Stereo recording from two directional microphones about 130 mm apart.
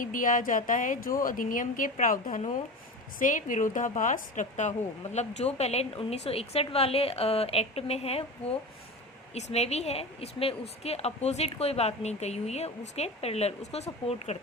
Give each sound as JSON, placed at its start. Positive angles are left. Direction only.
{"t": 0.0, "sound": "speech", "side_deg": 90}
{"t": 5.1, "sound": "a woman's voice", "side_deg": 55}
{"t": 9.3, "sound": "a woman's voice", "side_deg": 55}